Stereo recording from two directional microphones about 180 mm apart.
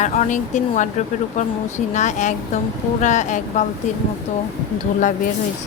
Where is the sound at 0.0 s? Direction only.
40° left (ahead or behind).